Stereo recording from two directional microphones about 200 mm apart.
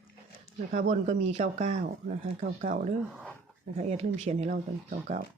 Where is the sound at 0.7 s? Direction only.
35° right (ahead or behind).